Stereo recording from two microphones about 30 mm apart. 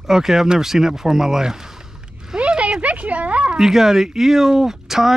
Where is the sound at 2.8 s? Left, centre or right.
Right.